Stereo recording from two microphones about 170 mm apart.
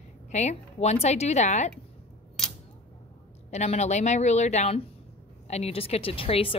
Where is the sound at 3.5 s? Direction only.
40° left (ahead or behind).